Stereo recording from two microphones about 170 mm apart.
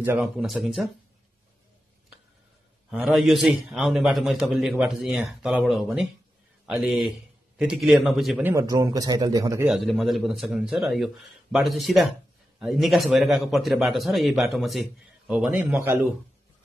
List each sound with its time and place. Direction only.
0.0 s a man's voice: 5° right (ahead or behind)
2.9 s a man's voice: centre (ahead or behind)
8.5 s speech: 20° right (ahead or behind)
9.7 s a man's voice: centre (ahead or behind)